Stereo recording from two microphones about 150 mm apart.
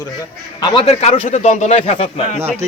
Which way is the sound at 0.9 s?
45° left (ahead or behind).